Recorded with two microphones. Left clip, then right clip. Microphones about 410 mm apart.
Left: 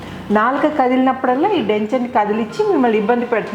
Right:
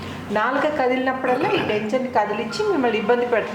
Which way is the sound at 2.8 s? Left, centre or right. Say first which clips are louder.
Left 3 dB; left.